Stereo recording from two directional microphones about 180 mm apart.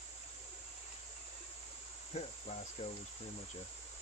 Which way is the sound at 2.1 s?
40° left (ahead or behind).